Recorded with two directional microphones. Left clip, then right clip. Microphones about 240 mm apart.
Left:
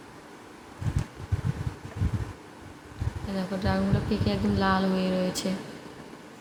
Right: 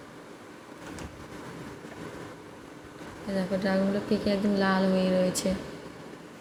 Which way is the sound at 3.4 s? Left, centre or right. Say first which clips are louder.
Right 2 dB; centre.